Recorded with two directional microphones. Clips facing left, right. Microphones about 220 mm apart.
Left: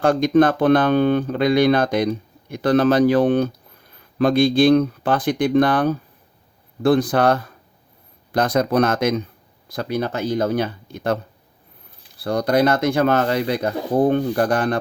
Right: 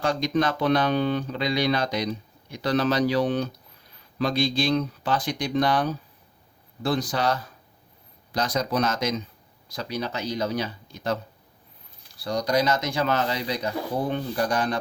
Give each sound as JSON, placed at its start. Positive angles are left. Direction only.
{"t": 0.0, "sound": "speech", "side_deg": 55}
{"t": 12.2, "sound": "speech", "side_deg": 55}